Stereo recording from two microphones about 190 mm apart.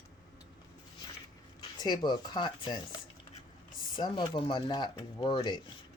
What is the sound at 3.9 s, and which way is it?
Speech, 25° left (ahead or behind).